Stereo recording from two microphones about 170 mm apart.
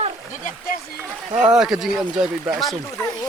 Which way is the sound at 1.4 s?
5° right (ahead or behind).